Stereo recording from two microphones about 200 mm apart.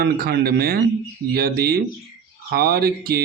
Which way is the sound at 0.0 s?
50° right (ahead or behind).